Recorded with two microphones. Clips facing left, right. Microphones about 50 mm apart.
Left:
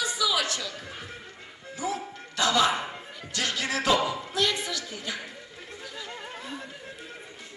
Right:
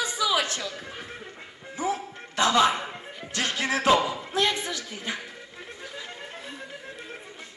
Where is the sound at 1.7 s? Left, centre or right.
Right.